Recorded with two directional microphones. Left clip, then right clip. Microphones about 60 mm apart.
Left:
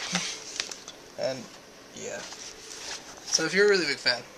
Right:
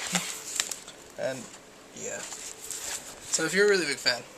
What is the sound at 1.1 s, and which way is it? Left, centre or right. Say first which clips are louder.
Speech: left 1 dB; left.